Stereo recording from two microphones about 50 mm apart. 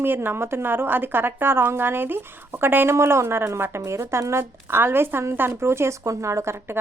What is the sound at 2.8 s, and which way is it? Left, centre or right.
Speech, right.